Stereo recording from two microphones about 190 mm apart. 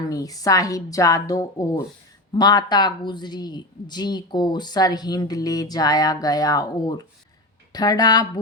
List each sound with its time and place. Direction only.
0.1 s a woman's voice: 20° left (ahead or behind)